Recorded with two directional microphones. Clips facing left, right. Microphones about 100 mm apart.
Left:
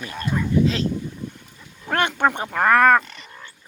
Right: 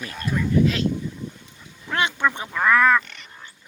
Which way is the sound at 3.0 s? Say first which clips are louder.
Left 2 dB; 35° left (ahead or behind).